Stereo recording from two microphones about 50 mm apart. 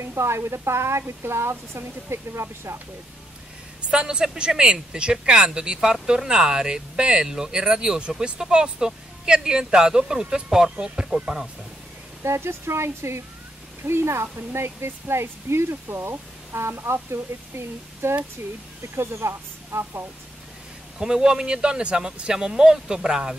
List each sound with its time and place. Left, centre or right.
0.0 s speech: right
3.9 s speech: centre
12.2 s speech: right
21.0 s speech: centre